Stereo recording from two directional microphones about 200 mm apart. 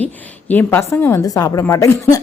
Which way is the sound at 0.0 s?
10° left (ahead or behind).